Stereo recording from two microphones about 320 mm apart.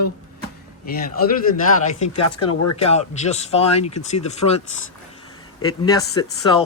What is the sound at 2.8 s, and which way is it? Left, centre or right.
Speech, centre.